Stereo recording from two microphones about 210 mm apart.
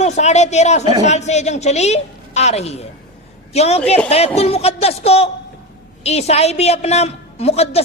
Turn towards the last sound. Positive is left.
turn(degrees=30)  # may be behind; listen again after turning